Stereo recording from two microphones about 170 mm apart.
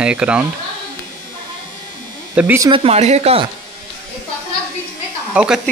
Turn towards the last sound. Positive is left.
turn(degrees=-5)  # may be behind; listen again after turning